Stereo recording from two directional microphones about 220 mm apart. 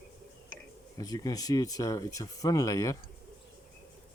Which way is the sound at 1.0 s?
15° left (ahead or behind).